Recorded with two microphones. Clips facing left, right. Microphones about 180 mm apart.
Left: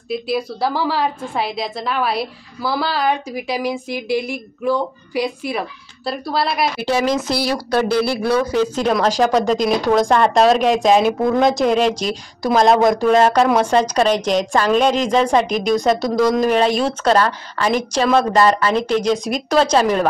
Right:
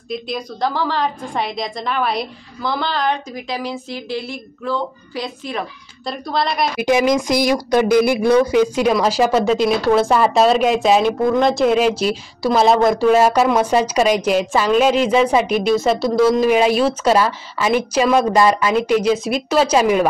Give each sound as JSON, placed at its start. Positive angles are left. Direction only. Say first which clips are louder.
{"t": 0.1, "sound": "a woman's voice", "louder": "left 4 dB", "side_deg": 5}
{"t": 6.8, "sound": "a woman's voice", "louder": "right 6 dB", "side_deg": -15}